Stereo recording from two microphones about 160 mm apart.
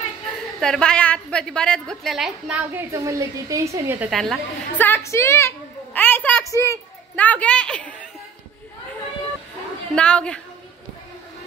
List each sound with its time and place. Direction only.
0.6 s a woman's voice: 5° left (ahead or behind)
2.9 s a woman's voice: 20° right (ahead or behind)
4.1 s a woman's voice: centre (ahead or behind)
4.7 s a woman's voice: 10° left (ahead or behind)
9.9 s a woman's voice: 5° left (ahead or behind)